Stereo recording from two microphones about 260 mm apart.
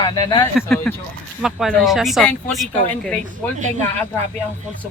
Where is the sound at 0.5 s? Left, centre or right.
Centre.